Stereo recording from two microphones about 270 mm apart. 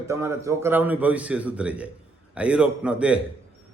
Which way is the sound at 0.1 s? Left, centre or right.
Centre.